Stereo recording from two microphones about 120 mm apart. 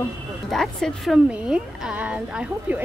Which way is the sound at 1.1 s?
10° right (ahead or behind).